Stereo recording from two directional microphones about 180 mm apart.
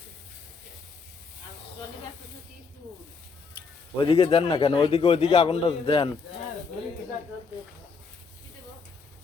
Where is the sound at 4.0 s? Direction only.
30° left (ahead or behind).